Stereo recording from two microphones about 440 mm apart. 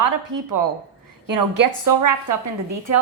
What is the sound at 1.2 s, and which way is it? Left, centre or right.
A woman's voice, right.